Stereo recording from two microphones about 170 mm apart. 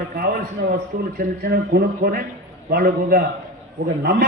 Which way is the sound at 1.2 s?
60° right (ahead or behind).